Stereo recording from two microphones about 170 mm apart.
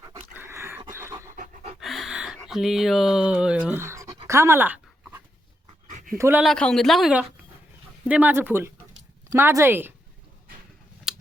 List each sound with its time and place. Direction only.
0.3 s dog: 15° right (ahead or behind)
1.3 s pant: 50° right (ahead or behind)
1.8 s a sound: centre (ahead or behind)
6.1 s speech: 15° right (ahead or behind)
6.4 s speech: 5° left (ahead or behind); by 9.9 s 15° right (ahead or behind)
11.1 s a sound: centre (ahead or behind)